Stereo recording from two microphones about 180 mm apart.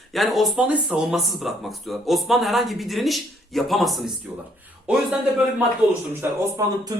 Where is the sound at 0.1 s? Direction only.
Centre (ahead or behind).